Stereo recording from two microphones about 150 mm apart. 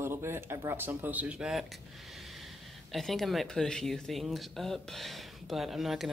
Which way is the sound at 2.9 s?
Centre (ahead or behind).